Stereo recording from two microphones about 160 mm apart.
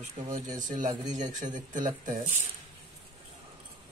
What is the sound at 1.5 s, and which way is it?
Speech, 55° right (ahead or behind).